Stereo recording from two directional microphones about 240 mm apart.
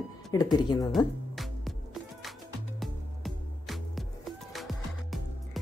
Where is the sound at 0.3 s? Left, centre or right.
Centre.